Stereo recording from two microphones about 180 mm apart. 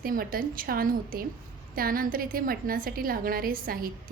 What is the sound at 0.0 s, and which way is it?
A woman's voice, 55° right (ahead or behind).